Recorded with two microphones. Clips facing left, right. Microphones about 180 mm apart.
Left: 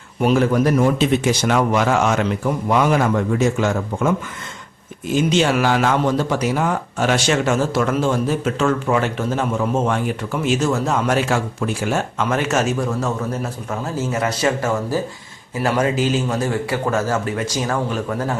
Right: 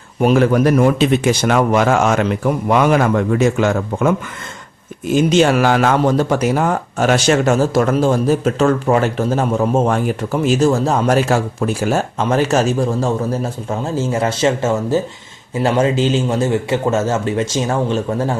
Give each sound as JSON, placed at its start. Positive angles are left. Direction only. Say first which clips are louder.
{"t": 0.3, "sound": "a man's voice", "louder": "right 3 dB", "side_deg": -65}
{"t": 5.1, "sound": "a man's voice", "louder": "right 4 dB", "side_deg": -45}